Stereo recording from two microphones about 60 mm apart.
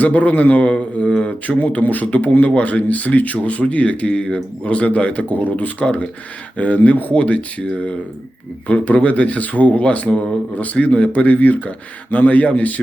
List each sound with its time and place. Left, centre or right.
0.0 s a man's voice: left